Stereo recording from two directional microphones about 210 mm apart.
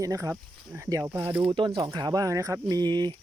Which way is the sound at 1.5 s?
20° right (ahead or behind).